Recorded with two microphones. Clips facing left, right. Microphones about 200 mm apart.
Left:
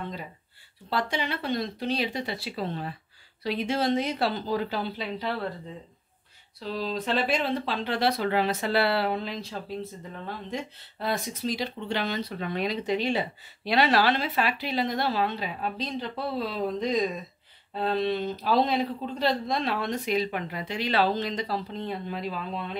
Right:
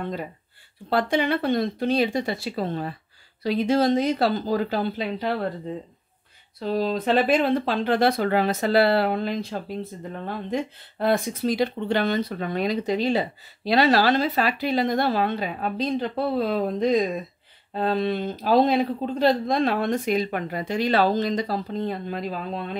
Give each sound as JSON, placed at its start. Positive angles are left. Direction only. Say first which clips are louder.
{"t": 0.0, "sound": "speech", "louder": "right 6 dB", "side_deg": -55}
{"t": 6.6, "sound": "speech", "louder": "right 7 dB", "side_deg": -55}